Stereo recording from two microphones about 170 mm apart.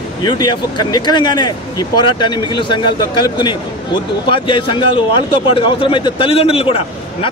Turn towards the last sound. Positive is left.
turn(degrees=35)  # may be behind; listen again after turning